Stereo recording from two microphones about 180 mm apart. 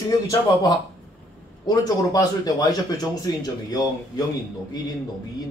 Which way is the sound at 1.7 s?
20° left (ahead or behind).